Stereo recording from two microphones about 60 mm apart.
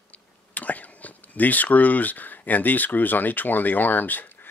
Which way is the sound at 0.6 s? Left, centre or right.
Left.